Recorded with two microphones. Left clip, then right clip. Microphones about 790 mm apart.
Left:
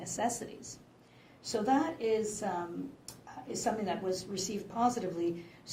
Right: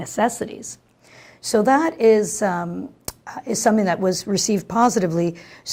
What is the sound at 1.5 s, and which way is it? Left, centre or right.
Speech, right.